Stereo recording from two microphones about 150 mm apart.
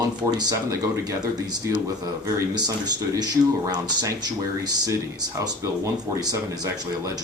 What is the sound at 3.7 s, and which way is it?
Speech, 30° right (ahead or behind).